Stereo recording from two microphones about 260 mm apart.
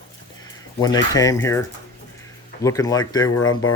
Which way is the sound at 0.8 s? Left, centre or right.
Centre.